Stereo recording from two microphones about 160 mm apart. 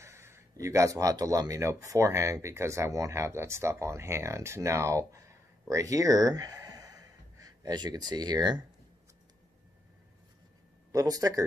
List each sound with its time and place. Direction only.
0.0 s speech: 15° right (ahead or behind)
10.9 s speech: 20° right (ahead or behind)